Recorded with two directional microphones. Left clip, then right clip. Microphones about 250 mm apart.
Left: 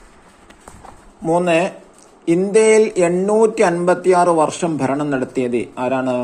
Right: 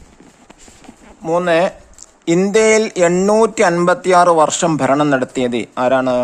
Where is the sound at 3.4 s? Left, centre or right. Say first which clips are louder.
Right 1 dB; right.